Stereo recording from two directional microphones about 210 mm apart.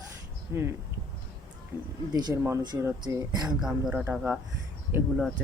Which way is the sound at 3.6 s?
5° right (ahead or behind).